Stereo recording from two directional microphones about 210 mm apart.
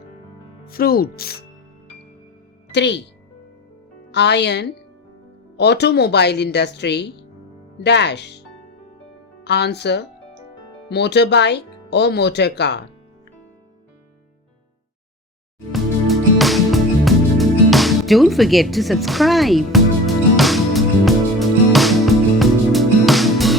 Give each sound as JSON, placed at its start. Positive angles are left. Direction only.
{"t": 0.6, "sound": "speech", "side_deg": 45}
{"t": 2.7, "sound": "speech", "side_deg": 55}
{"t": 4.1, "sound": "speech", "side_deg": 55}
{"t": 9.4, "sound": "speech", "side_deg": 55}
{"t": 15.7, "sound": "music", "side_deg": 0}